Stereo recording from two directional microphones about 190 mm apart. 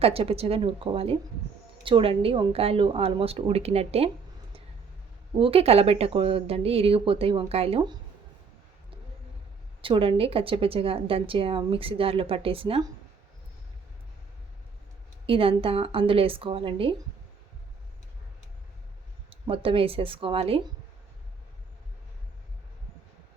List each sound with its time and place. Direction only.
0.0 s a woman's voice: 30° right (ahead or behind)
5.4 s a woman's voice: 30° right (ahead or behind)
9.8 s a woman's voice: 30° right (ahead or behind)
15.3 s a woman's voice: 30° right (ahead or behind)
19.3 s a woman's voice: 30° right (ahead or behind)